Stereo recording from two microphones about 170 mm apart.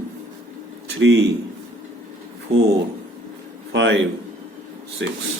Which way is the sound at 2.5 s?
40° right (ahead or behind).